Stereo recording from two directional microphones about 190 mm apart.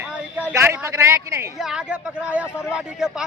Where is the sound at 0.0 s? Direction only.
10° right (ahead or behind).